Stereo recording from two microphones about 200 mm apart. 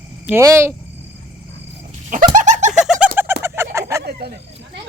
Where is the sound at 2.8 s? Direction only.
5° right (ahead or behind).